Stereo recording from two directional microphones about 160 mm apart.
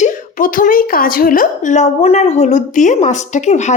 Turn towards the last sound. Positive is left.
turn(degrees=45)  # may be behind; listen again after turning